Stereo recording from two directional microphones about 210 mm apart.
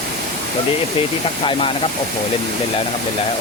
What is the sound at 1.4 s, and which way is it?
Speech, 25° left (ahead or behind).